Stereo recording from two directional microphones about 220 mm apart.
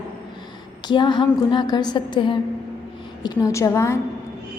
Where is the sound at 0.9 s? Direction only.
20° left (ahead or behind).